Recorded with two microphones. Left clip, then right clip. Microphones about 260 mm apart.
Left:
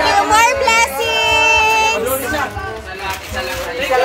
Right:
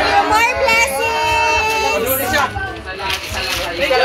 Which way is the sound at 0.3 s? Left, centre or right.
Centre.